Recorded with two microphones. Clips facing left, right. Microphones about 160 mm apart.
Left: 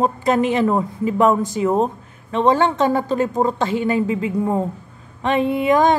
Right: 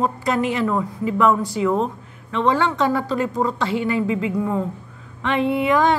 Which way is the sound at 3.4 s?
35° left (ahead or behind).